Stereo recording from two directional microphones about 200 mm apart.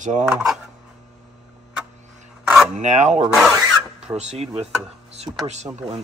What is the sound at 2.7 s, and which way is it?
Speech, 35° right (ahead or behind).